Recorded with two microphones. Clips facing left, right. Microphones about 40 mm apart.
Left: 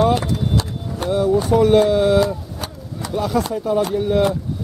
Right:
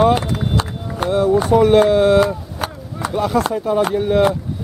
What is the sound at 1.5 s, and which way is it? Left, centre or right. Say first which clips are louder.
Speech: right 2 dB; centre.